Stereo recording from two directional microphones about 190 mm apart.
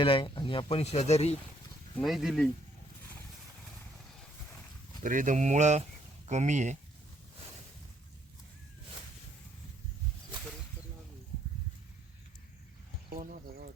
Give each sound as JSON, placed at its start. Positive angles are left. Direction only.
{"t": 0.0, "sound": "speech", "side_deg": 25}
{"t": 2.0, "sound": "speech", "side_deg": 0}
{"t": 5.0, "sound": "speech", "side_deg": -45}
{"t": 13.1, "sound": "a sound", "side_deg": -50}